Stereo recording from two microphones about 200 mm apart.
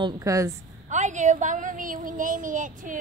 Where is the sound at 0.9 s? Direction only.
35° right (ahead or behind).